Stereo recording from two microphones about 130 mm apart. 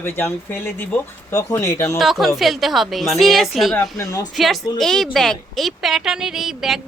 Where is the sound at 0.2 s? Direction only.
15° left (ahead or behind).